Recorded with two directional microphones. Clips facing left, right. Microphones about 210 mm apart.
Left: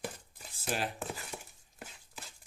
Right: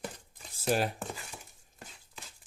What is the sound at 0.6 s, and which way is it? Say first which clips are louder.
Speech: right 7 dB; 45° right (ahead or behind).